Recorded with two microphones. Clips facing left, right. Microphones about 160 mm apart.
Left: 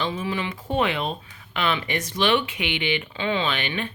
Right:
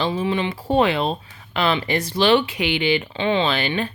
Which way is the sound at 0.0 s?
30° right (ahead or behind).